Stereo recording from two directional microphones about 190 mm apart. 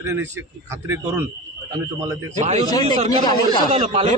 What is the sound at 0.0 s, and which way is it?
Speech, 15° right (ahead or behind).